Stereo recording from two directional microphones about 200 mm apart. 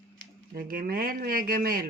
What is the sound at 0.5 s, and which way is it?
Speech, 45° right (ahead or behind).